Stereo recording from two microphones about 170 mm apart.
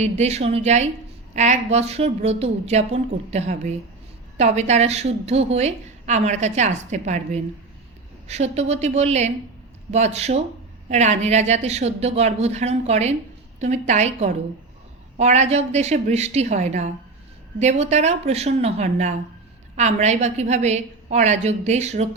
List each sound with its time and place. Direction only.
0.0 s a woman's voice: 40° right (ahead or behind)